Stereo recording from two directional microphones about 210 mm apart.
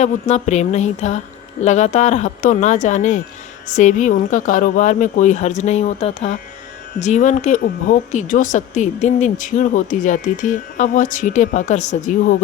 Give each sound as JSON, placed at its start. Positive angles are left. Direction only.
{"t": 0.0, "sound": "speech", "side_deg": 35}